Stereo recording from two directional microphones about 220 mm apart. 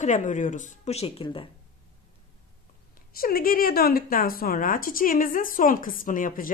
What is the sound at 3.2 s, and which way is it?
Speech, 40° left (ahead or behind).